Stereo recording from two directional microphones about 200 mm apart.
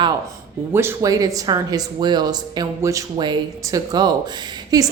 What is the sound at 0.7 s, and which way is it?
A woman's voice, 10° right (ahead or behind).